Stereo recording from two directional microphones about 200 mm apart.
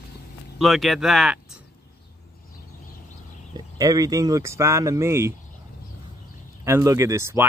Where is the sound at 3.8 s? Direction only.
15° right (ahead or behind).